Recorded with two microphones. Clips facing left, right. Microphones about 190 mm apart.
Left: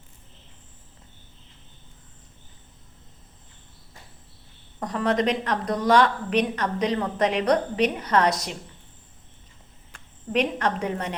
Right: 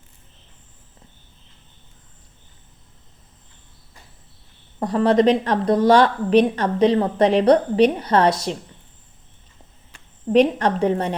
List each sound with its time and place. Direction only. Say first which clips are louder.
4.8 s a woman's voice: right 7 dB; 30° right (ahead or behind)
10.2 s a woman's voice: right 8 dB; 35° right (ahead or behind)